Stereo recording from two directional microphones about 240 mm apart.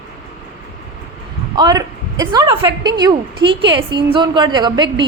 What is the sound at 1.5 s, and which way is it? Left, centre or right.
A woman's voice, centre.